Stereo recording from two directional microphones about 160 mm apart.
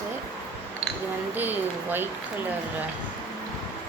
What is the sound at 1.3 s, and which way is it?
Speech, 10° right (ahead or behind).